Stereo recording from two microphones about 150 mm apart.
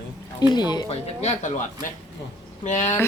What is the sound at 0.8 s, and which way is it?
Speech, 45° left (ahead or behind).